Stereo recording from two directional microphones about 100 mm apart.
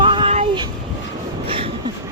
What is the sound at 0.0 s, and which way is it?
Vehicle, 55° right (ahead or behind).